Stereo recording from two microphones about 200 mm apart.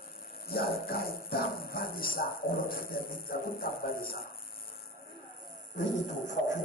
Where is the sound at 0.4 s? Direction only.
50° left (ahead or behind).